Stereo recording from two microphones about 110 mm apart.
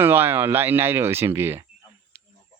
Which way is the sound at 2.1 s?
20° right (ahead or behind).